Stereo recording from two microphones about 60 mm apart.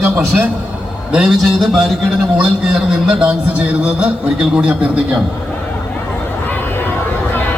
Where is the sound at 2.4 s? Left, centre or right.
Centre.